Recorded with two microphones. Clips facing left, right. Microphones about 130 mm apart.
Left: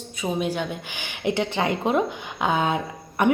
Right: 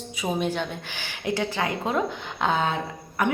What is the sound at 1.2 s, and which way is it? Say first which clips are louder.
A woman's voice: left 3 dB; 25° left (ahead or behind).